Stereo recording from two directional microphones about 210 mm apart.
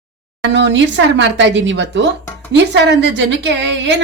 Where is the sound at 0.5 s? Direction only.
55° right (ahead or behind).